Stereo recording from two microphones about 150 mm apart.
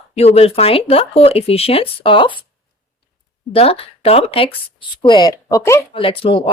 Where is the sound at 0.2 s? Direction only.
45° left (ahead or behind).